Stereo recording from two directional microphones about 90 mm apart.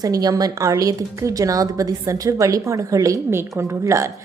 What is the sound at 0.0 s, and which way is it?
A woman's voice, 45° right (ahead or behind).